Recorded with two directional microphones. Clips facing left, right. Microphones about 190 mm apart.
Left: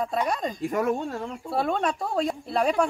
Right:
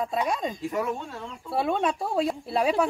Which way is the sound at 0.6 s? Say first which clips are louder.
Left 4 dB; 50° left (ahead or behind).